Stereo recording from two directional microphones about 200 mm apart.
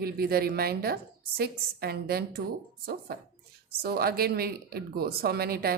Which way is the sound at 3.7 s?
50° right (ahead or behind).